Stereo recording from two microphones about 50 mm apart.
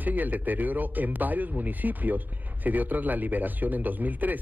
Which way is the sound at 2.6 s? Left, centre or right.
Right.